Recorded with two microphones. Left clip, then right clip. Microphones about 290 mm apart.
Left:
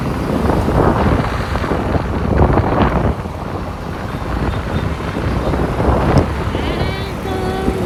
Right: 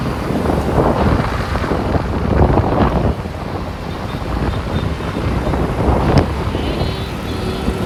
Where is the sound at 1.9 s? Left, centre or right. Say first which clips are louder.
Even; centre.